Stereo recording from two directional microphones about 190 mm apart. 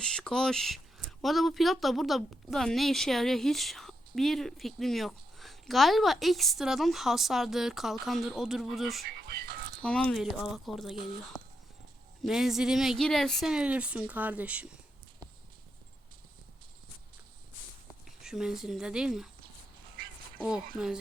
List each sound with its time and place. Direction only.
0.0 s speech: 5° left (ahead or behind)
9.0 s music: 55° right (ahead or behind)
9.8 s speech: 5° left (ahead or behind)
12.2 s speech: centre (ahead or behind)
18.2 s speech: 5° right (ahead or behind)
20.4 s speech: centre (ahead or behind)